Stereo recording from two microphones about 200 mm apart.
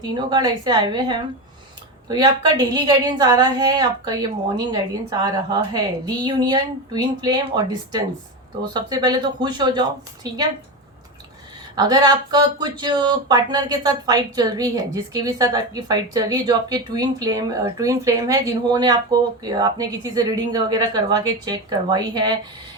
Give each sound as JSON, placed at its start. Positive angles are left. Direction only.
{"t": 0.1, "sound": "speech", "side_deg": -20}
{"t": 11.7, "sound": "speech", "side_deg": -20}